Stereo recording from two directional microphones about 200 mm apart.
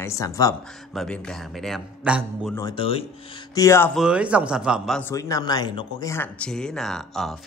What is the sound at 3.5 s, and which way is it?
Speech, 15° left (ahead or behind).